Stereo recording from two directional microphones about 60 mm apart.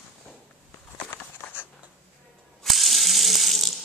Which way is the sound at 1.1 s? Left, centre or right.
Left.